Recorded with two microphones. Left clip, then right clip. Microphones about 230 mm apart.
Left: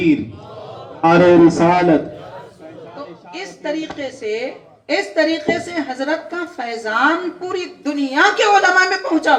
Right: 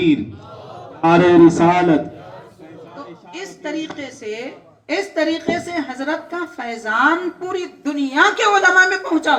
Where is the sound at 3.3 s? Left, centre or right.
Right.